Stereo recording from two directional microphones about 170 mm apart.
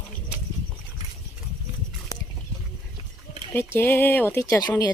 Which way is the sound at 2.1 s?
20° left (ahead or behind).